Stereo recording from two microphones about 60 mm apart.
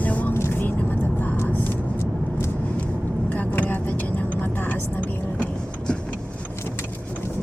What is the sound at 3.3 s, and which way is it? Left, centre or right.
Vehicle, left.